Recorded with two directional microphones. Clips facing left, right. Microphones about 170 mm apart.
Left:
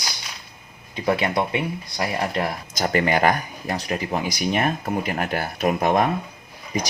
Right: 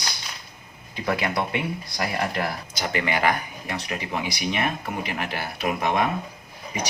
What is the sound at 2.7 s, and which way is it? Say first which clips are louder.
Speech: left 6 dB; 40° left (ahead or behind).